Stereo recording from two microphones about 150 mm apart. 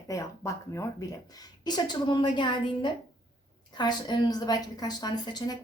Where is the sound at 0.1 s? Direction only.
20° left (ahead or behind).